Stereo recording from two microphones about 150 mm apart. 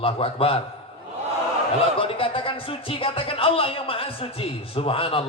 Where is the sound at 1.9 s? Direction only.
35° left (ahead or behind).